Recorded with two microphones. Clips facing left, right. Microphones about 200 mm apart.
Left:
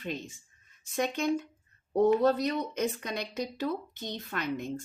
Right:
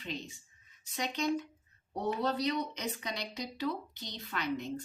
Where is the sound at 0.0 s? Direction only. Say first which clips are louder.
Left 4 dB; 50° left (ahead or behind).